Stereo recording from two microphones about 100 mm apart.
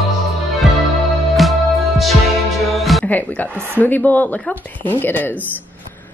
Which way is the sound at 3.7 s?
20° left (ahead or behind).